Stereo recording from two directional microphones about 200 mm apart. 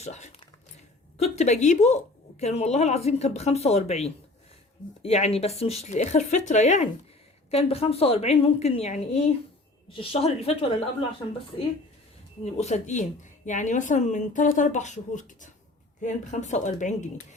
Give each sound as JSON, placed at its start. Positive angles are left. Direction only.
{"t": 0.0, "sound": "a woman's voice", "side_deg": 35}
{"t": 12.5, "sound": "speech", "side_deg": 35}